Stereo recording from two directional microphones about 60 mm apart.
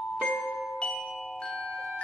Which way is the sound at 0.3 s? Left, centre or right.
Left.